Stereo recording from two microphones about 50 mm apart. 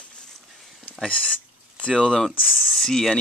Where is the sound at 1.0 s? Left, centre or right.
Left.